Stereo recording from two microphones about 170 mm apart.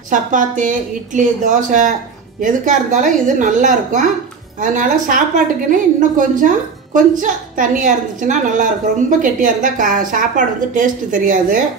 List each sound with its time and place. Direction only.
0.1 s a woman's voice: 50° right (ahead or behind)